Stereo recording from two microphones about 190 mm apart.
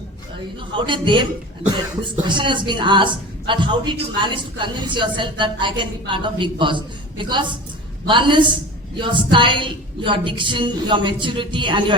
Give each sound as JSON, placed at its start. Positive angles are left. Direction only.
{"t": 0.8, "sound": "speech", "side_deg": -25}